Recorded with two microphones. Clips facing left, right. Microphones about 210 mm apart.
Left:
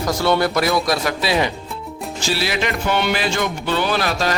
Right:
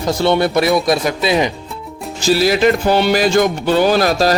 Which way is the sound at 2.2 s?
40° right (ahead or behind).